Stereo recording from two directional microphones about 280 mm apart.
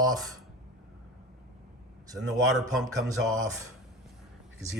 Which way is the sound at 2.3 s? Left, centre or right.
Centre.